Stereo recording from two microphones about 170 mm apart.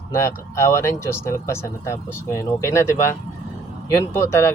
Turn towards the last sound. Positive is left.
turn(degrees=15)  # may be behind; listen again after turning